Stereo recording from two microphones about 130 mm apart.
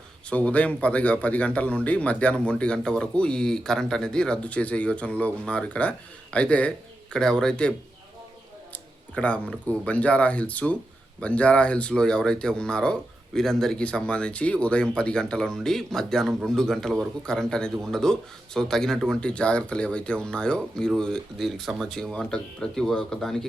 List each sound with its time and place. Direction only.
0.3 s speech: 10° left (ahead or behind)
8.7 s speech: 10° left (ahead or behind)